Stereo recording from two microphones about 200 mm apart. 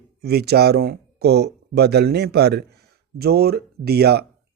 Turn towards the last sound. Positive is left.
turn(degrees=-55)  # may be behind; listen again after turning